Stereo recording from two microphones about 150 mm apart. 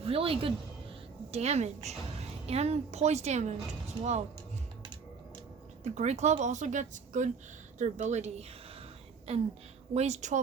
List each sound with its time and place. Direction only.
0.0 s a woman's voice: 40° right (ahead or behind)
5.8 s a woman's voice: 50° right (ahead or behind)